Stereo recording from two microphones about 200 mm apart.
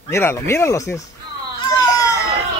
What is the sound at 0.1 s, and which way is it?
Speech, 15° left (ahead or behind).